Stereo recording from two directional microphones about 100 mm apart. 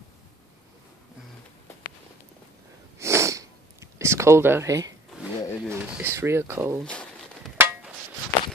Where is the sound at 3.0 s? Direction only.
30° right (ahead or behind).